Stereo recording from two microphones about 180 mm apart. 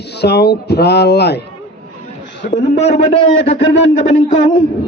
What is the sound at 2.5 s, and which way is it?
Speech, 35° left (ahead or behind).